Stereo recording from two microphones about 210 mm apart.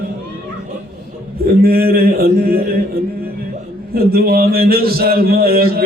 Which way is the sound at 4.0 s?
45° right (ahead or behind).